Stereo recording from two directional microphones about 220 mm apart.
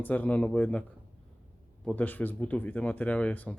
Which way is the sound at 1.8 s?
5° left (ahead or behind).